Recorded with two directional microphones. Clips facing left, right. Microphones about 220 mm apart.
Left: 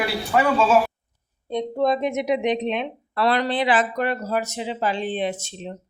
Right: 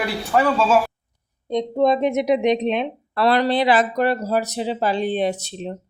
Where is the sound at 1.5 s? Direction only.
20° right (ahead or behind).